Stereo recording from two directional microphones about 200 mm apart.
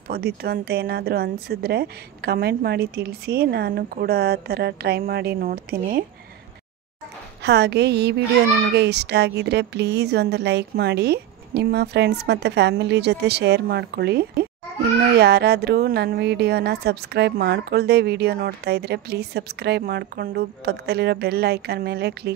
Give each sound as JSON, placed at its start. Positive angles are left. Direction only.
{"t": 0.1, "sound": "a woman's voice", "side_deg": -50}
{"t": 7.4, "sound": "a woman's voice", "side_deg": -55}